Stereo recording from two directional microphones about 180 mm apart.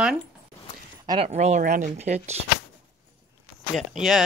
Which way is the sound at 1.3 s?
40° right (ahead or behind).